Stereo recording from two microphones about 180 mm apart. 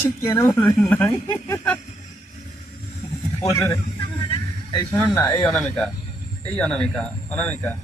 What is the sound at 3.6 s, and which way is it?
Vehicle, 25° left (ahead or behind).